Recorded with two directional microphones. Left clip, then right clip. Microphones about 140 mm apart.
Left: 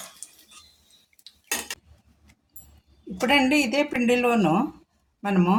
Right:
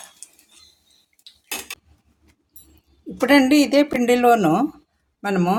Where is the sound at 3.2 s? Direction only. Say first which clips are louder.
Right 5 dB; 80° right.